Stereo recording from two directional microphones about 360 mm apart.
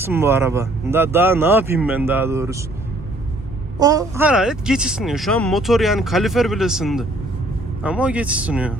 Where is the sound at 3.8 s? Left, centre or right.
Centre.